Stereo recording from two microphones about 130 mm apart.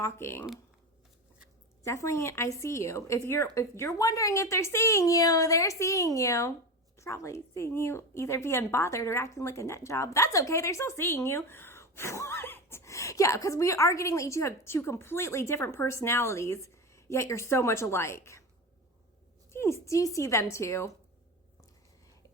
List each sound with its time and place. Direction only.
0.0 s a woman's voice: 20° left (ahead or behind)
1.8 s a woman's voice: 20° left (ahead or behind)
19.5 s a woman's voice: 20° left (ahead or behind)